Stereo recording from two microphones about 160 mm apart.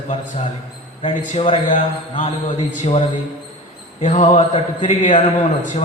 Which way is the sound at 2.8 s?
45° left (ahead or behind).